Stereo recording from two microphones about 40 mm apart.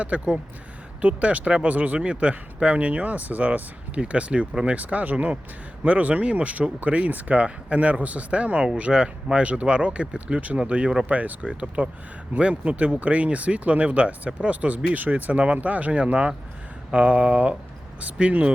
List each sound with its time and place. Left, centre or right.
0.1 s speech: right
8.6 s speech: right
12.7 s speech: right